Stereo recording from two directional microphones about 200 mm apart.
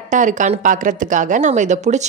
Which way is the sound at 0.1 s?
40° right (ahead or behind).